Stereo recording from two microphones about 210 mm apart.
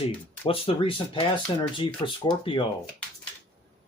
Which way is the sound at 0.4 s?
25° left (ahead or behind).